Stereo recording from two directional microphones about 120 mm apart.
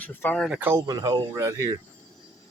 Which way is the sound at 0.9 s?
30° right (ahead or behind).